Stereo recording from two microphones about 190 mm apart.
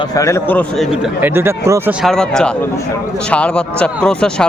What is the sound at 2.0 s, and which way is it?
Speech, 5° left (ahead or behind).